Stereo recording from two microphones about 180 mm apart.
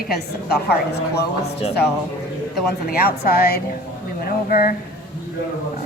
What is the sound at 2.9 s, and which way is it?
A woman's voice, 55° left (ahead or behind).